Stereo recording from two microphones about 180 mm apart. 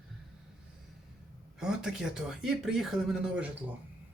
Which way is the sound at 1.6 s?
5° right (ahead or behind).